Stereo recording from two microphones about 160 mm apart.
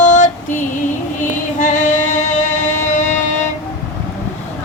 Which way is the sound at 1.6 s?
50° left (ahead or behind).